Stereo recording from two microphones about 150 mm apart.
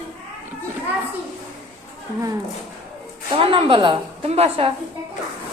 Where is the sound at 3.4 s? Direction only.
40° right (ahead or behind).